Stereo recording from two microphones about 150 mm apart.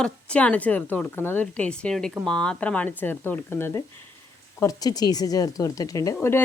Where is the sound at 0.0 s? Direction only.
10° left (ahead or behind).